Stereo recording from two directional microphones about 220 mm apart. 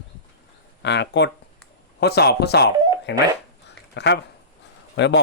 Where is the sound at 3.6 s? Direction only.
50° left (ahead or behind).